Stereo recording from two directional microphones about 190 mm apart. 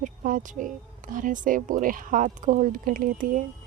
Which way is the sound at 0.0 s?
45° right (ahead or behind).